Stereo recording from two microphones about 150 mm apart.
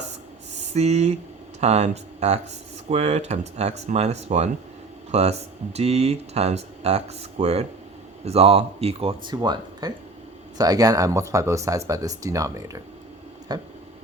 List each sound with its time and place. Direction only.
0.7 s speech: 45° right (ahead or behind); by 13.6 s 25° right (ahead or behind)